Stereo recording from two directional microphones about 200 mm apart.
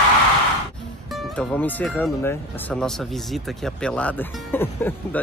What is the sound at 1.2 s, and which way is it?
Speech, 5° left (ahead or behind).